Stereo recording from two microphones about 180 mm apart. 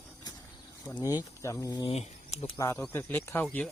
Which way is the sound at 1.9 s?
35° left (ahead or behind).